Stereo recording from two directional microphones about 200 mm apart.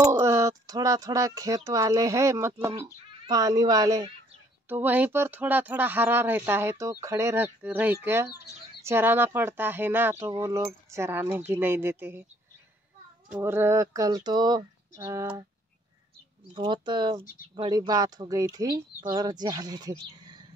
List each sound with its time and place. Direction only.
0.0 s speech: 15° right (ahead or behind)
13.3 s speech: 10° right (ahead or behind)
16.5 s speech: 25° right (ahead or behind)